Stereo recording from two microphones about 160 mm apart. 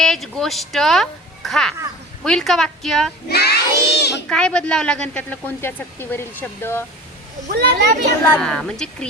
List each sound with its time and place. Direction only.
0.0 s a woman's voice: centre (ahead or behind)
3.2 s crowd: 85° left
4.3 s speech: 5° left (ahead or behind)
7.5 s a child's voice: 90° right
8.4 s a woman's voice: 5° left (ahead or behind)